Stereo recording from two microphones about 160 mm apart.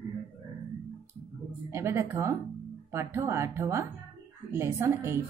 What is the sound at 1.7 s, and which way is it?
Speech, 15° right (ahead or behind).